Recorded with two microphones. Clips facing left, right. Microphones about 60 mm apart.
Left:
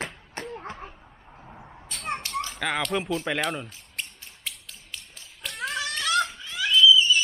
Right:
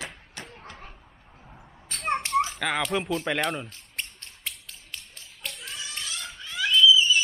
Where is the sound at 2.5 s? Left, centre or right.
Centre.